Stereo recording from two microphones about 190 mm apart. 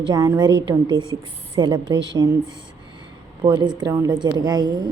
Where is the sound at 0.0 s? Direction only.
20° right (ahead or behind).